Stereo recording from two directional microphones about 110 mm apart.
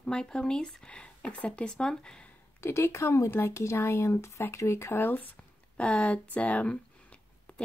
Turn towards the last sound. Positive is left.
turn(degrees=10)  # may be behind; listen again after turning